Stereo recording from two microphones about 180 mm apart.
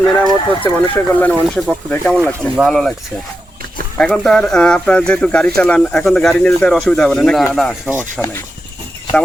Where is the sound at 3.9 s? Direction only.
5° left (ahead or behind).